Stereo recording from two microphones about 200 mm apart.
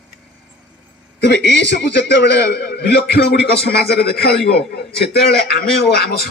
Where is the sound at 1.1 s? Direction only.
60° left (ahead or behind).